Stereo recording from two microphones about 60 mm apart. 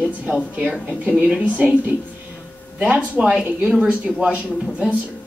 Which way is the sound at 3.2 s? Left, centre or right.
Centre.